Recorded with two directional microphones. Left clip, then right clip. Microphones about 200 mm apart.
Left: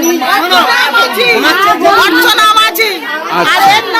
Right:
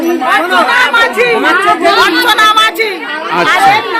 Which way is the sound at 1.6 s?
35° left (ahead or behind).